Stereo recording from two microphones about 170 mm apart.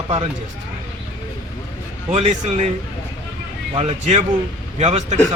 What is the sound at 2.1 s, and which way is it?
Speech, 40° right (ahead or behind).